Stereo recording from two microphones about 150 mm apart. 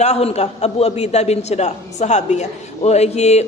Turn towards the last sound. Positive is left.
turn(degrees=45)  # may be behind; listen again after turning